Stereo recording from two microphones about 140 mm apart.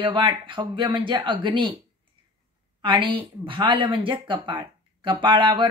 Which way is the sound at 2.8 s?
35° right (ahead or behind).